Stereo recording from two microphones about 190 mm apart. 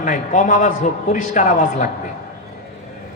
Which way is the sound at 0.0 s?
45° left (ahead or behind).